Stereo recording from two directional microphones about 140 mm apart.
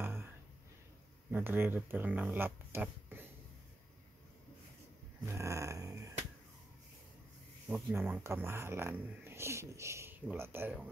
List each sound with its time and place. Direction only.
0.0 s a sound: 15° right (ahead or behind)
1.3 s speech: 15° right (ahead or behind)
5.2 s finger snapping: 20° right (ahead or behind)
7.9 s speech: 15° right (ahead or behind)